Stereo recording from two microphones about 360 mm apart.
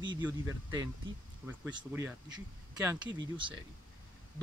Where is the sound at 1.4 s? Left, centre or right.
Centre.